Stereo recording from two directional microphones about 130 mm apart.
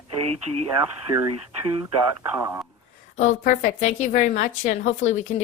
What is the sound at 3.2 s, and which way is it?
A woman's voice, 70° left (ahead or behind).